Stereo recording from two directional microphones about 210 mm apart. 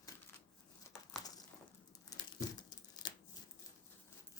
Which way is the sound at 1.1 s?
15° left (ahead or behind).